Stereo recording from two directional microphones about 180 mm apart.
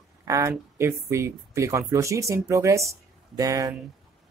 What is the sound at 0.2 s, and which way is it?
Speech, 15° right (ahead or behind).